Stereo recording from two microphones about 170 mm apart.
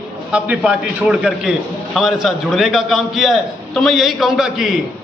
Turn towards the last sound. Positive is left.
turn(degrees=0)  # may be behind; listen again after turning